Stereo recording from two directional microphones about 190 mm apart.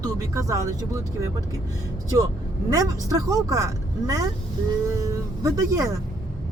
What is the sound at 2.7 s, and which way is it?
Speech, 20° right (ahead or behind).